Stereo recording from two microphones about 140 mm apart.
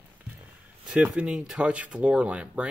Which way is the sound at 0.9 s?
5° right (ahead or behind).